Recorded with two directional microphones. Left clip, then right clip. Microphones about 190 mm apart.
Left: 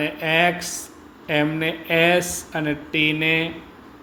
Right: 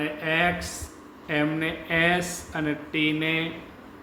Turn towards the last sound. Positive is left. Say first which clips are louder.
# left 5 dB
turn(degrees=30)  # may be behind; listen again after turning